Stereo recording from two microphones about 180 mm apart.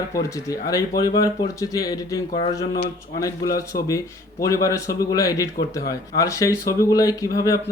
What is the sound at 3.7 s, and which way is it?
Speech, 20° left (ahead or behind).